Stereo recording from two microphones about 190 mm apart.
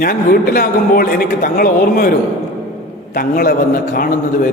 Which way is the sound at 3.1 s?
50° left (ahead or behind).